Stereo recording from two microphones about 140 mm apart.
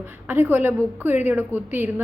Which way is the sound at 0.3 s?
15° right (ahead or behind).